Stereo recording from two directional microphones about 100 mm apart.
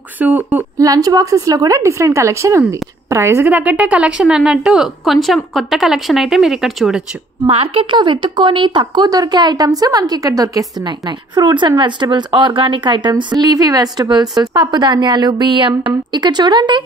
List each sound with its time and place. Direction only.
0.2 s speech: 15° right (ahead or behind)
0.7 s a woman's voice: 35° right (ahead or behind)
3.4 s a woman's voice: 15° right (ahead or behind)
7.4 s a woman's voice: 70° right (ahead or behind); by 10.7 s 35° right (ahead or behind)
11.1 s a woman's voice: 50° right (ahead or behind)